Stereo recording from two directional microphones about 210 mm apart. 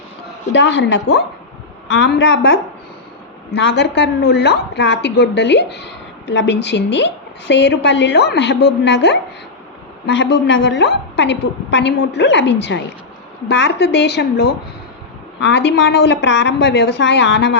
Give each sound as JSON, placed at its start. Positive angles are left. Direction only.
{"t": 0.5, "sound": "a woman's voice", "side_deg": 55}